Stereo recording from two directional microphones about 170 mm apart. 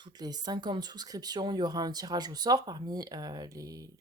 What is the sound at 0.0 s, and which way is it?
Speech, 25° right (ahead or behind).